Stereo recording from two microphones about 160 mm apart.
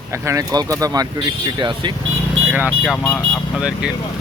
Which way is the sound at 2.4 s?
10° right (ahead or behind).